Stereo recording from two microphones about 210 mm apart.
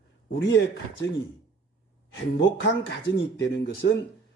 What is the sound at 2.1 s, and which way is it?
Speech, 60° left (ahead or behind).